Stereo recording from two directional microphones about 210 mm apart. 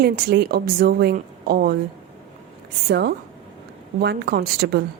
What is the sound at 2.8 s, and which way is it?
A woman's voice, 50° right (ahead or behind).